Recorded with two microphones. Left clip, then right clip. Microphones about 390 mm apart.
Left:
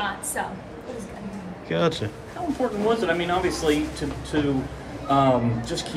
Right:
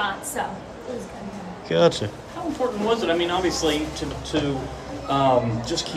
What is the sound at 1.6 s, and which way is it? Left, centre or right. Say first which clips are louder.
Speech: right 5 dB; centre.